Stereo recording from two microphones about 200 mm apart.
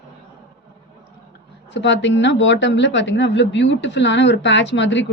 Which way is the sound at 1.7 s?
65° left (ahead or behind).